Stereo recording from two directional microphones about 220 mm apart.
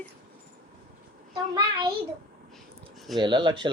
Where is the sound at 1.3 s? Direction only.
15° right (ahead or behind).